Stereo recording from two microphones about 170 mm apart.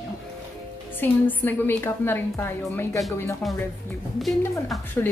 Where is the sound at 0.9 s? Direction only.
10° left (ahead or behind).